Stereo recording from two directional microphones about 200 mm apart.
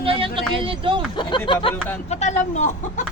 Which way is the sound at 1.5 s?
25° left (ahead or behind).